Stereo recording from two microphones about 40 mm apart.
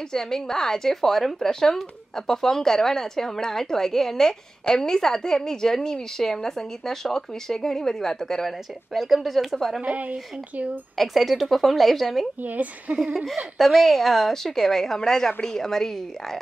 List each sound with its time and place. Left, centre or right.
0.1 s speech: centre
8.9 s speech: centre
9.8 s a woman's voice: right
11.0 s speech: centre
12.4 s speech: right
13.0 s speech: centre